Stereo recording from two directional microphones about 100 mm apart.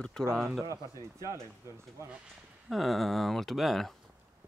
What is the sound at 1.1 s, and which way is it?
Speech, 30° right (ahead or behind).